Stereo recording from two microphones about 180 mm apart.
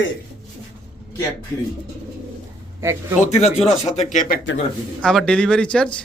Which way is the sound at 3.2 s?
40° left (ahead or behind).